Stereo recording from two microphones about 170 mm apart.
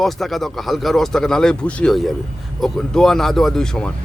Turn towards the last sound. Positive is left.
turn(degrees=5)  # may be behind; listen again after turning